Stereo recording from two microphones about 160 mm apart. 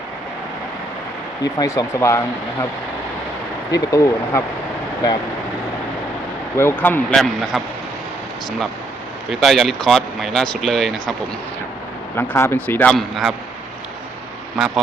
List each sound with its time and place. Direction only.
1.5 s speech: 20° left (ahead or behind)
3.7 s speech: 20° left (ahead or behind)
6.6 s a man's voice: 15° left (ahead or behind)
7.5 s speech: 5° right (ahead or behind)
9.3 s speech: centre (ahead or behind)
12.1 s a man's voice: 15° left (ahead or behind); by 13.3 s centre (ahead or behind)